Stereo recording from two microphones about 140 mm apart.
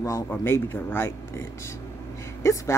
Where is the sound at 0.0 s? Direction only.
20° left (ahead or behind).